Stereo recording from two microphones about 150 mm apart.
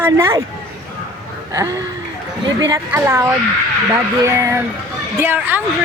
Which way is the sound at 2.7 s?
15° right (ahead or behind).